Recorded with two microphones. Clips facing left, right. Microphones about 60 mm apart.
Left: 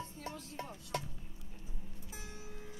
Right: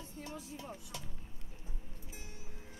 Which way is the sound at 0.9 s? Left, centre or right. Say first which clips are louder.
Left 9 dB; left.